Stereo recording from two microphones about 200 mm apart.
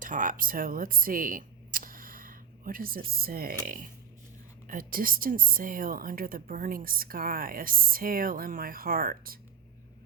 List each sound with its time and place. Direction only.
0.0 s camera: 40° right (ahead or behind)
3.1 s a woman's voice: 50° right (ahead or behind)